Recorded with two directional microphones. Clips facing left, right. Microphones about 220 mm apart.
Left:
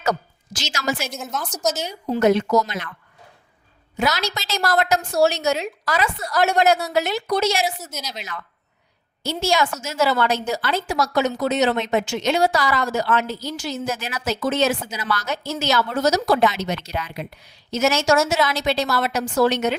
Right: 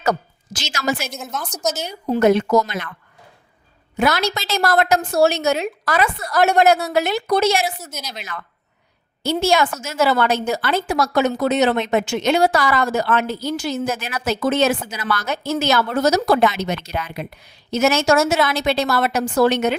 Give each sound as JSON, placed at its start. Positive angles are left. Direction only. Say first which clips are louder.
{"t": 0.0, "sound": "a woman's voice", "louder": "right 2 dB", "side_deg": -55}
{"t": 1.1, "sound": "a woman's voice", "louder": "even", "side_deg": 0}
{"t": 2.0, "sound": "a woman's voice", "louder": "right 2 dB", "side_deg": -55}
{"t": 3.9, "sound": "a woman's voice", "louder": "right 4 dB", "side_deg": -55}